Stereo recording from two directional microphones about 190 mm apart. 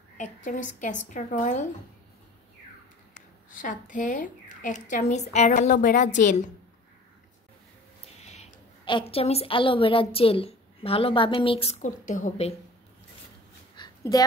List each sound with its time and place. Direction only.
0.5 s a woman's voice: 45° left (ahead or behind)
3.4 s a woman's voice: 45° left (ahead or behind)
8.2 s a woman's voice: 35° left (ahead or behind)
13.7 s a sound: 20° left (ahead or behind)